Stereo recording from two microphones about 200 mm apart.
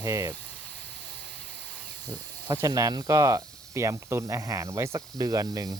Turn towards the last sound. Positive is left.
turn(degrees=-20)  # may be behind; listen again after turning